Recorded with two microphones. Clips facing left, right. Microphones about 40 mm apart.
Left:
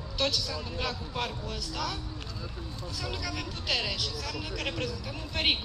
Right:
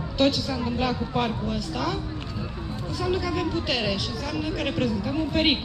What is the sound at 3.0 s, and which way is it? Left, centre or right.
A woman's voice, centre.